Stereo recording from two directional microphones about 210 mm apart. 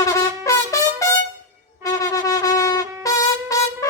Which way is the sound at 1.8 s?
15° left (ahead or behind).